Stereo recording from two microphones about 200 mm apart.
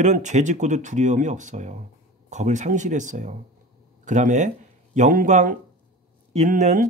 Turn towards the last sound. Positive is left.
turn(degrees=-40)  # may be behind; listen again after turning